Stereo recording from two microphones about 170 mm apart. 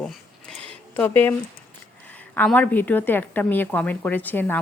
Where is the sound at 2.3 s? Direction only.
10° left (ahead or behind).